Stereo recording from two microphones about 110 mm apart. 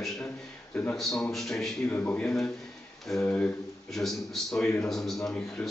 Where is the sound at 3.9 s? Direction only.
5° left (ahead or behind).